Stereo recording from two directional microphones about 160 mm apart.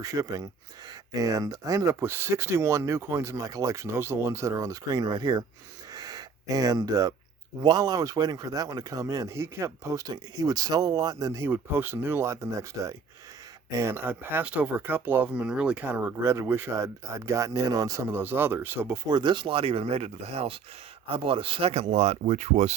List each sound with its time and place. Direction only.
0.0 s speech: 20° right (ahead or behind)
5.9 s a sound: 25° right (ahead or behind)
7.6 s speech: 25° right (ahead or behind)
19.0 s speech: 30° right (ahead or behind); by 22.7 s 45° right (ahead or behind)